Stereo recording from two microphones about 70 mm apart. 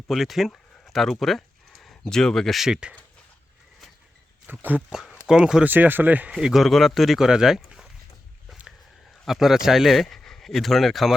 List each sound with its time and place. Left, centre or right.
0.1 s speech: centre
0.9 s a sound: centre
2.6 s speech: centre
4.4 s speech: right
5.3 s speech: centre
5.6 s speech: right
6.3 s speech: centre
9.2 s speech: centre